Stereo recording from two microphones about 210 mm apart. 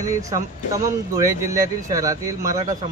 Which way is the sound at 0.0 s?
15° right (ahead or behind).